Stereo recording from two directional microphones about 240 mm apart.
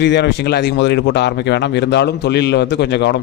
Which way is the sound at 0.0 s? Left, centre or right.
Left.